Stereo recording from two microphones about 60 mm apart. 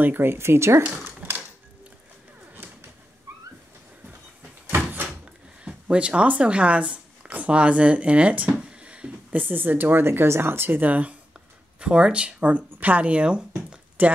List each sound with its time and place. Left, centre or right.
0.0 s speech: right
3.3 s a sound: right
4.6 s door: right
5.7 s speech: centre